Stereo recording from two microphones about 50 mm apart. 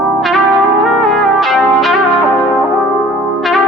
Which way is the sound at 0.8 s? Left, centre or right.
Centre.